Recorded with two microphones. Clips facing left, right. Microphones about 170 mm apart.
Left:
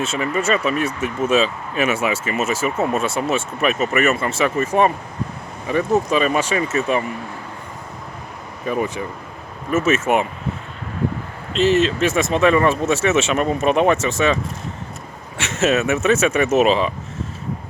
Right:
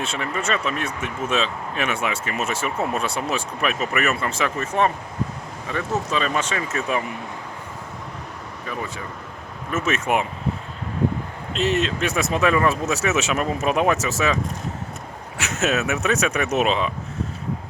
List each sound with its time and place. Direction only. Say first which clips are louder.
0.0 s speech: left 5 dB; 5° left (ahead or behind)
8.6 s speech: left 9 dB; 20° left (ahead or behind)
9.7 s speech: left 5 dB; 5° left (ahead or behind)
11.5 s speech: left 6 dB; centre (ahead or behind)
15.4 s speech: left 4 dB; centre (ahead or behind)